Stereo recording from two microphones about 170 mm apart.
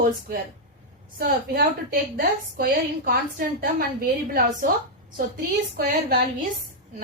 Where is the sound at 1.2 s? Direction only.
60° right (ahead or behind).